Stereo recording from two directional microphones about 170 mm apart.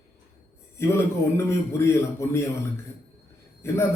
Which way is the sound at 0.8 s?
15° left (ahead or behind).